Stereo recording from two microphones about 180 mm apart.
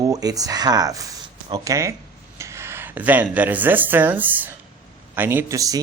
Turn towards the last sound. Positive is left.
turn(degrees=-20)  # may be behind; listen again after turning